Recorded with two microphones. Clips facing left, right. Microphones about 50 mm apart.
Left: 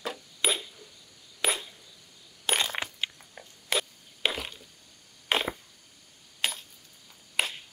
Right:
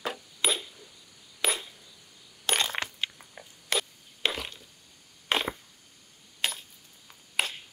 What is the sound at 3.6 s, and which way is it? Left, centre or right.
Mechanisms, centre.